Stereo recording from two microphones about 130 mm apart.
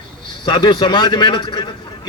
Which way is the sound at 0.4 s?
35° left (ahead or behind).